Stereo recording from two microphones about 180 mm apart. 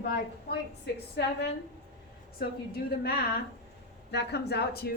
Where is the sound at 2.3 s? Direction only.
60° left (ahead or behind).